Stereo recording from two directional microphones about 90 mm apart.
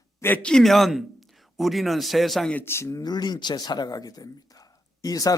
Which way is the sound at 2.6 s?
30° left (ahead or behind).